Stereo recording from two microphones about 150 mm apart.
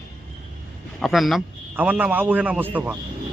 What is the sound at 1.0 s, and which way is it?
Speech, centre (ahead or behind).